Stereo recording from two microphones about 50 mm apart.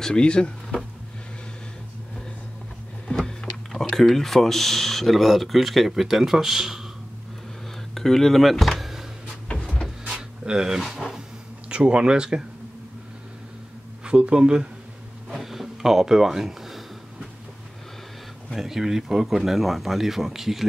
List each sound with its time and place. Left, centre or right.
0.0 s speech: centre
3.1 s a sound: centre
3.7 s speech: centre
7.9 s speech: centre
10.1 s a sound: centre
10.8 s speech: centre
11.7 s speech: right
14.0 s speech: centre
15.2 s a sound: centre
18.5 s speech: centre